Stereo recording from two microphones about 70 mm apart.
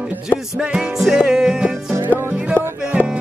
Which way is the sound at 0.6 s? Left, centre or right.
Centre.